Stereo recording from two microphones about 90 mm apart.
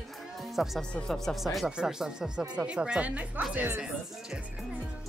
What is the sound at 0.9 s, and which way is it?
Speech, 5° left (ahead or behind).